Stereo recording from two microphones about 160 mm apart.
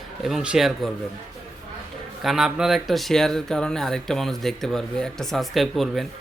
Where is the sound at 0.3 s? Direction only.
Centre (ahead or behind).